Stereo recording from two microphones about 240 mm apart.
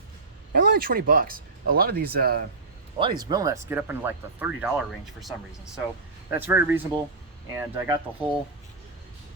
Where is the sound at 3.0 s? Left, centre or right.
Centre.